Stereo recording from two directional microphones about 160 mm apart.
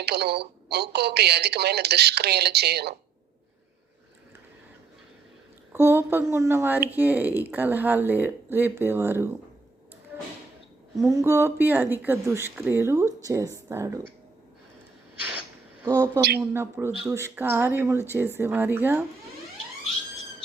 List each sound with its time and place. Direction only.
0.0 s speech: 90° right
5.7 s speech: 15° right (ahead or behind)
11.1 s speech: 15° right (ahead or behind)
15.8 s a woman's voice: 20° right (ahead or behind)